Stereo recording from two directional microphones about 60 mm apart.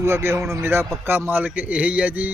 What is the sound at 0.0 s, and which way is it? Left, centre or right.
A man's voice, right.